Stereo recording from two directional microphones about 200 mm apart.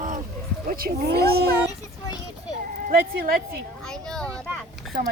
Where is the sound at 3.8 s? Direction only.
5° left (ahead or behind).